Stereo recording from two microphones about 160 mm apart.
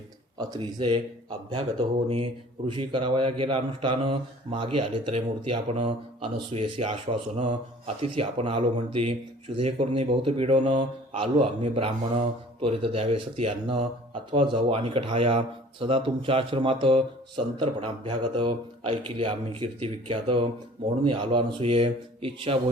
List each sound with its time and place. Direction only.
0.3 s speech: 25° right (ahead or behind)